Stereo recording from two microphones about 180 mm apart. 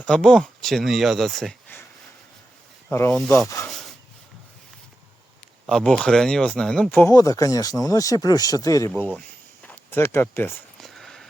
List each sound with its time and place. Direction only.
0.0 s speech: 5° left (ahead or behind)
2.9 s speech: 15° left (ahead or behind)
3.7 s rub: centre (ahead or behind)
5.6 s speech: 5° left (ahead or behind)
8.9 s speech: 5° left (ahead or behind)
10.8 s a sound: centre (ahead or behind)